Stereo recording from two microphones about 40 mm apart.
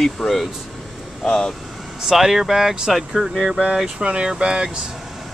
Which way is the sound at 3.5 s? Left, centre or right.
Centre.